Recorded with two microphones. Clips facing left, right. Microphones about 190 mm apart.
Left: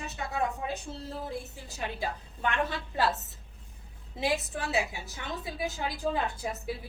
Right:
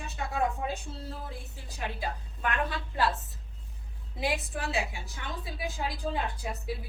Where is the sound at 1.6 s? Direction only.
25° left (ahead or behind).